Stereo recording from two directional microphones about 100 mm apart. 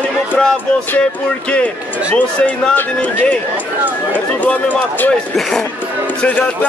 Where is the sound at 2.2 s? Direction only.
10° left (ahead or behind).